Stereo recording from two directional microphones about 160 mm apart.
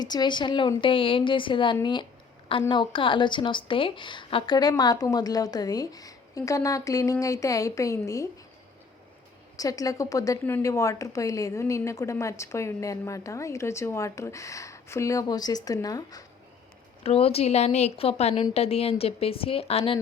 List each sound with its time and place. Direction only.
0.0 s a woman's voice: 25° left (ahead or behind)
9.6 s a woman's voice: 20° left (ahead or behind)
17.0 s a woman's voice: 40° left (ahead or behind)